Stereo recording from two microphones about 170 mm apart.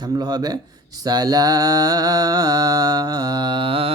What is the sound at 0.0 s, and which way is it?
Speech, 25° right (ahead or behind).